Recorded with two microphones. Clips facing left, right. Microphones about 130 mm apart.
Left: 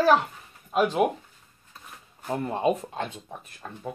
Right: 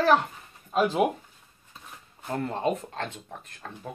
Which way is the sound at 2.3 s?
15° left (ahead or behind).